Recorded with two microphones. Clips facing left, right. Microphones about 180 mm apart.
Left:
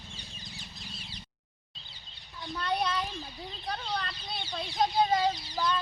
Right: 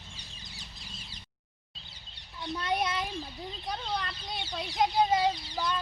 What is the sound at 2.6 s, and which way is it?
A child's voice, 20° right (ahead or behind).